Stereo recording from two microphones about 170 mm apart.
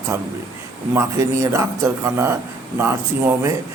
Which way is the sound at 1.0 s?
15° right (ahead or behind).